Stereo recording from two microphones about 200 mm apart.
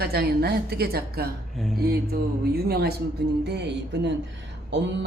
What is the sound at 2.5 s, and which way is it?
A woman's voice, 50° right (ahead or behind).